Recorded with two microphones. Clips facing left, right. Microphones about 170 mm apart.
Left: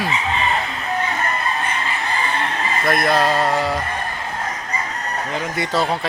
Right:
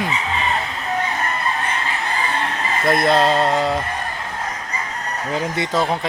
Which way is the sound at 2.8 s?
25° right (ahead or behind).